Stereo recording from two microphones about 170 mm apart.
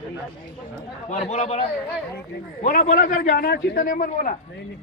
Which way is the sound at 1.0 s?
40° left (ahead or behind).